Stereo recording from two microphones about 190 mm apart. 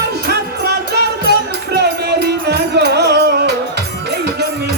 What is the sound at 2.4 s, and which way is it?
Music, 60° right (ahead or behind).